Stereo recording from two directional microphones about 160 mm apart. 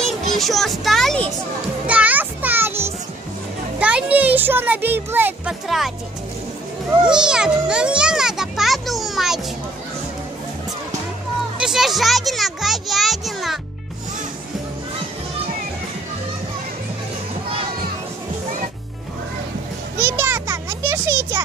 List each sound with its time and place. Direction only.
0.0 s a child's voice: centre (ahead or behind)
1.9 s children playing: 10° right (ahead or behind)
3.8 s speech: 10° right (ahead or behind)
7.1 s a child's voice: 5° right (ahead or behind)
11.5 s a child's voice: 5° right (ahead or behind)
20.0 s children playing: 15° right (ahead or behind)